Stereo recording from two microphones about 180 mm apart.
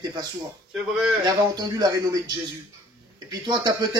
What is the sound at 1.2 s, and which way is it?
Speech, 20° right (ahead or behind).